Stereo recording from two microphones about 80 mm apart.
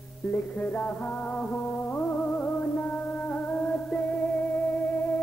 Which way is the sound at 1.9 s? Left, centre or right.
Centre.